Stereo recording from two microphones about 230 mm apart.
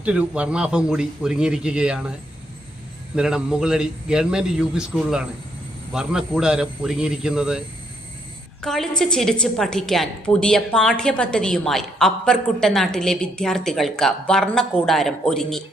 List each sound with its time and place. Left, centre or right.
0.0 s a woman's voice: centre
3.2 s a woman's voice: centre
8.6 s a woman's voice: centre